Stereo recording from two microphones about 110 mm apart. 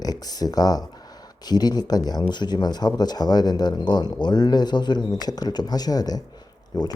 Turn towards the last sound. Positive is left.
turn(degrees=40)  # may be behind; listen again after turning